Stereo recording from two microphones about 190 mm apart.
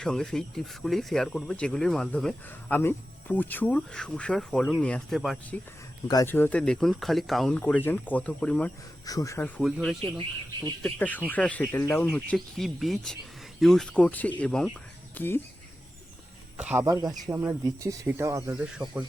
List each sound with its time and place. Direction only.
0.0 s speech: 5° left (ahead or behind)
6.1 s speech: 15° left (ahead or behind)
9.0 s speech: 15° left (ahead or behind)
9.6 s speech: centre (ahead or behind)
10.2 s speech: 25° right (ahead or behind)
10.8 s speech: 10° left (ahead or behind)
16.6 s speech: 5° right (ahead or behind)
16.8 s speech: 20° right (ahead or behind)
18.5 s speech: 5° right (ahead or behind)